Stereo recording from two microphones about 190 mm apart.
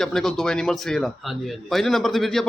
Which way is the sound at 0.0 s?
Centre (ahead or behind).